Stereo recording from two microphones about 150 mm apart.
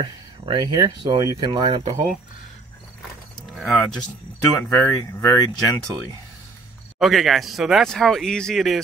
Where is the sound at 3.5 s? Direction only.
Centre (ahead or behind).